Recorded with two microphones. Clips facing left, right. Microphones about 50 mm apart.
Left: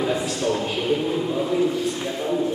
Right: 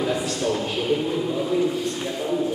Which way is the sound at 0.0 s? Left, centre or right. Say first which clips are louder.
Left 1 dB; centre.